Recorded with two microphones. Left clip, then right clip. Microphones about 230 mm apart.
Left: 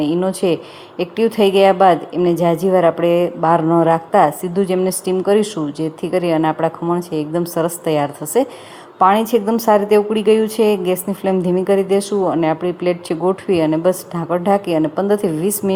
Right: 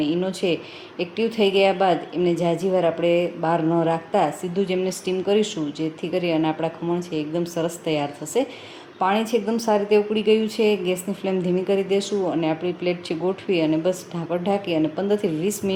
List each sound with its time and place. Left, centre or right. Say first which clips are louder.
0.0 s a woman's voice: left 6 dB; left